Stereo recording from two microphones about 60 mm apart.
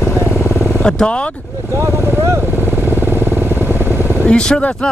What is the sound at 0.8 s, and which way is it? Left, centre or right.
Speech, centre.